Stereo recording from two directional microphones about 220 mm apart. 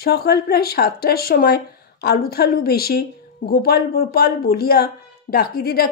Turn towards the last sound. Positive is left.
turn(degrees=45)  # may be behind; listen again after turning